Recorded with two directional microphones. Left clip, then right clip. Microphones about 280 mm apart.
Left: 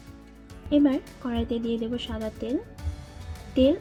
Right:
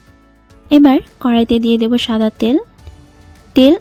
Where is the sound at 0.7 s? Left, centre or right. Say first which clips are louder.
Right 13 dB; right.